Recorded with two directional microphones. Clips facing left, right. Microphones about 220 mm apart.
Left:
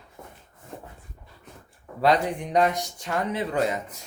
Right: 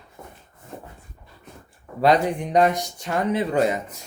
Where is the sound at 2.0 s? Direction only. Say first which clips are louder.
Right 3 dB; 15° right (ahead or behind).